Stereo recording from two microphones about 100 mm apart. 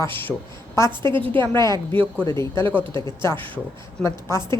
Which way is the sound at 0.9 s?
55° right (ahead or behind).